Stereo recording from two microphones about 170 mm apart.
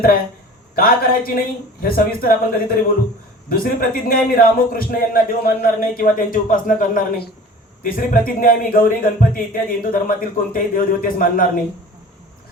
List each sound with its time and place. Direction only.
0.8 s a man's voice: 60° left (ahead or behind)